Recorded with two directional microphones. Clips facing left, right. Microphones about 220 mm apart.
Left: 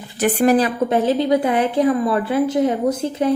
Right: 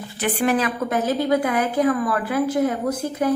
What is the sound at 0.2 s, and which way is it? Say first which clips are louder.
A woman's voice: left 6 dB; 45° left (ahead or behind).